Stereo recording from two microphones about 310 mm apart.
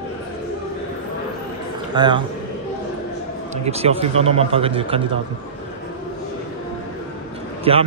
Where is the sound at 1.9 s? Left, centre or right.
Centre.